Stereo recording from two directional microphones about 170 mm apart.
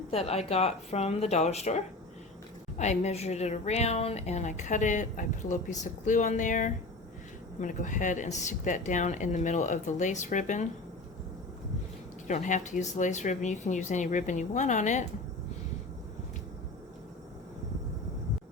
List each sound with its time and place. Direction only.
0.1 s a woman's voice: 35° left (ahead or behind)
12.3 s a woman's voice: 45° left (ahead or behind)